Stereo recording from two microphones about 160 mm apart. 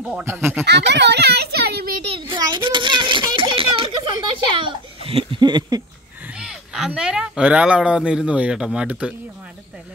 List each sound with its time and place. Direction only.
0.0 s speech: 10° right (ahead or behind)
0.7 s a child's voice: 90° right
2.0 s a sound: 35° right (ahead or behind)
4.6 s laughter: 35° right (ahead or behind)
6.4 s speech: 5° right (ahead or behind)